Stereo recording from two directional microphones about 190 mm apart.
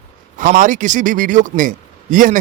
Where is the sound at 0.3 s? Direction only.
45° right (ahead or behind).